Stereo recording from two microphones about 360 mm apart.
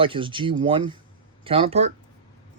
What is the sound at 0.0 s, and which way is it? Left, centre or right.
Speech, centre.